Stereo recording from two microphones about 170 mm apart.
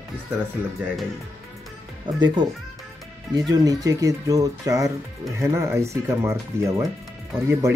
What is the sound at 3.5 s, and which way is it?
Speech, 20° right (ahead or behind).